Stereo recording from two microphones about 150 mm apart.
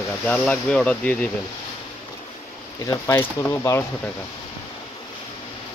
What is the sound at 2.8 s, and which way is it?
Speech, 20° left (ahead or behind).